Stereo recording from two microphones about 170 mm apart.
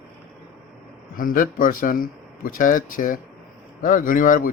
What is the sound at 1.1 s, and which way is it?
A man's voice, 55° left (ahead or behind).